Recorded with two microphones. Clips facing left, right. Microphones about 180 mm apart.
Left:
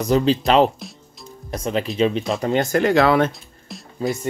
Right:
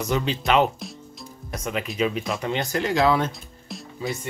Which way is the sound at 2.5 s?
50° left (ahead or behind).